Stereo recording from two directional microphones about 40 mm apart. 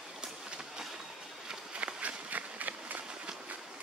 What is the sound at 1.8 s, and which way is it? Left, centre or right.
Run, right.